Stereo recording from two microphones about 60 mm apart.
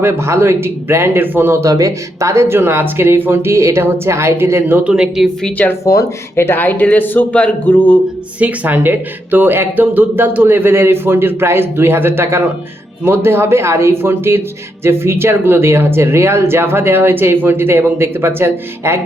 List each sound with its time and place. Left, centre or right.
0.0 s speech: right
1.6 s speech: right
4.8 s speech: centre
5.8 s speech: left
6.3 s speech: left
8.4 s speech: right